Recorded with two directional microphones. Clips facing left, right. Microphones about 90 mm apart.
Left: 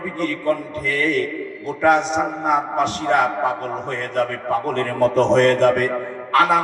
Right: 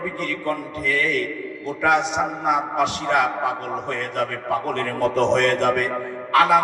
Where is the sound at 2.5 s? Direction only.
40° left (ahead or behind).